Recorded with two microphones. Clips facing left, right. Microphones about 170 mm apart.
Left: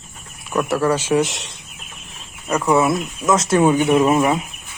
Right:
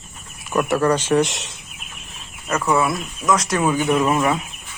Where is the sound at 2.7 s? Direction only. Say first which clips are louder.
Left 3 dB; 20° left (ahead or behind).